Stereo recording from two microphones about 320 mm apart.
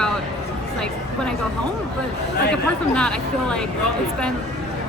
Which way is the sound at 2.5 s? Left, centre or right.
Centre.